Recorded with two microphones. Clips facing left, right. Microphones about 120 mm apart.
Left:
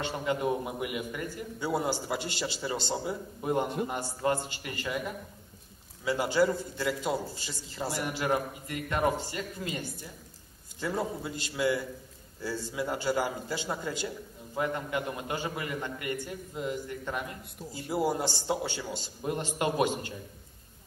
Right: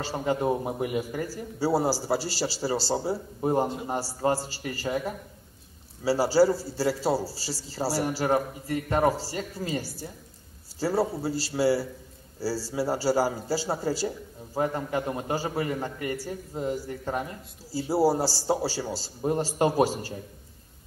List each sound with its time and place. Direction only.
0.0 s a man's voice: 35° right (ahead or behind)